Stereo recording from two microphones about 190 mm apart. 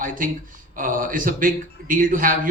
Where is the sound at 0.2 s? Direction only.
45° right (ahead or behind).